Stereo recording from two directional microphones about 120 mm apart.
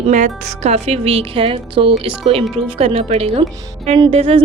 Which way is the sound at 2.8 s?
60° right (ahead or behind).